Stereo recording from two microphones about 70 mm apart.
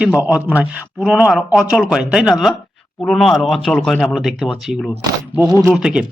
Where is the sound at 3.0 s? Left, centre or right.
Centre.